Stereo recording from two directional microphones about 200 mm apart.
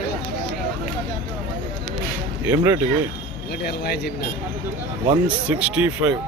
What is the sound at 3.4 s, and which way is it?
Speech, 55° left (ahead or behind).